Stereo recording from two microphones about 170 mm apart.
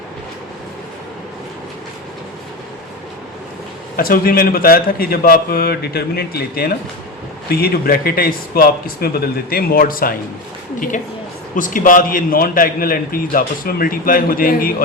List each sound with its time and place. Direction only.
3.9 s a man's voice: 60° left (ahead or behind)
11.5 s a man's voice: 50° left (ahead or behind)